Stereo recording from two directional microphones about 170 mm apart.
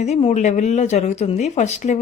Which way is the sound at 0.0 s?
40° left (ahead or behind).